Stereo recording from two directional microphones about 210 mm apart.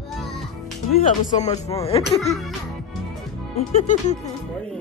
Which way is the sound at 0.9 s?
30° left (ahead or behind).